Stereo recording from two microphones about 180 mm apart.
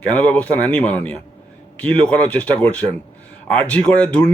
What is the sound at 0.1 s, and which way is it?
A man's voice, 5° left (ahead or behind).